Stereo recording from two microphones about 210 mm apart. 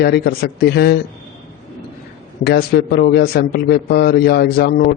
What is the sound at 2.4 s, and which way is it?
Speech, 50° left (ahead or behind).